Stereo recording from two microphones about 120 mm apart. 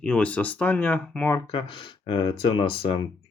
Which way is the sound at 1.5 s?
45° left (ahead or behind).